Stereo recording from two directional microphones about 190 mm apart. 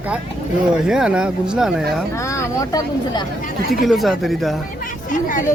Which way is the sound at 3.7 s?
Centre (ahead or behind).